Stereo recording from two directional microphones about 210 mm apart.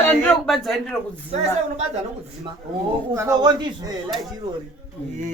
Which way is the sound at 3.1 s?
15° right (ahead or behind).